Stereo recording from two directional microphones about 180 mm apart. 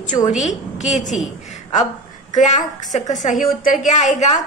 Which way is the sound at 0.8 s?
40° left (ahead or behind).